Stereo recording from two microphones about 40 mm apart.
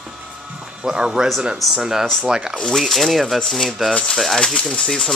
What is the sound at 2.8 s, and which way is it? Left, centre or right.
Speech, centre.